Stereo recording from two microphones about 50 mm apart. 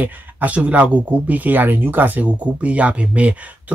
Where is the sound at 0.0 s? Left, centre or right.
Right.